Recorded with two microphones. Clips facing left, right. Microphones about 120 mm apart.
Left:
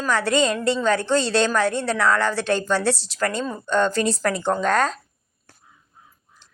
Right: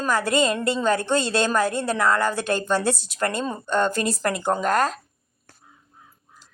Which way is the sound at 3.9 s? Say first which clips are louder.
Left 3 dB; 45° right (ahead or behind).